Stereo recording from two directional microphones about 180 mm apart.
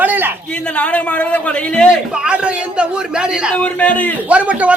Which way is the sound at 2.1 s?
5° right (ahead or behind).